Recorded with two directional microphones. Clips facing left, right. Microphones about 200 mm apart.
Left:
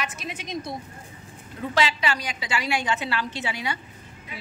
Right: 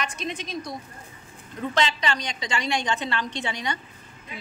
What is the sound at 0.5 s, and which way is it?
Speech, 25° left (ahead or behind).